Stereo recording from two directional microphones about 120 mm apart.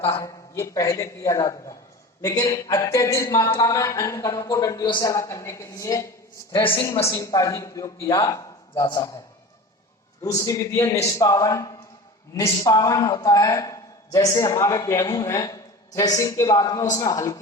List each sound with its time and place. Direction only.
0.0 s a man's voice: 25° left (ahead or behind)
5.1 s a man's voice: 25° left (ahead or behind)
6.6 s a woman's voice: 45° left (ahead or behind)
7.0 s a man's voice: 25° left (ahead or behind)
10.3 s a man's voice: 25° left (ahead or behind)